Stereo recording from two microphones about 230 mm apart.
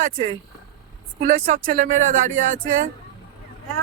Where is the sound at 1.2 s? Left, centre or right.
Right.